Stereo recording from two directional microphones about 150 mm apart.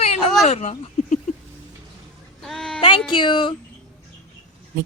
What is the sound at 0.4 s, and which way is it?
Speech, 50° left (ahead or behind).